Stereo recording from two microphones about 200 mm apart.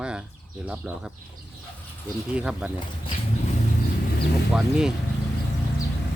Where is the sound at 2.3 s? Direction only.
5° right (ahead or behind).